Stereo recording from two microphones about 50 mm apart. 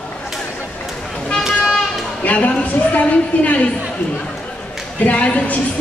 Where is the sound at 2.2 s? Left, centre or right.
Left.